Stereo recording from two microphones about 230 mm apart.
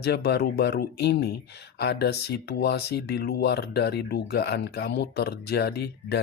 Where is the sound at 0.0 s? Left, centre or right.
Left.